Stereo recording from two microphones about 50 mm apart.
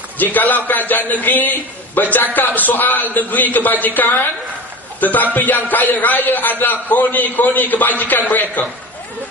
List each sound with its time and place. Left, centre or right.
0.2 s a man's voice: left